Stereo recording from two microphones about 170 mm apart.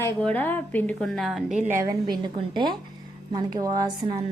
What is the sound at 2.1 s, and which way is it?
A woman's voice, 25° right (ahead or behind).